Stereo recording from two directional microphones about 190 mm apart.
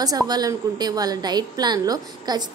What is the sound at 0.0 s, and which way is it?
A woman's voice, 20° right (ahead or behind).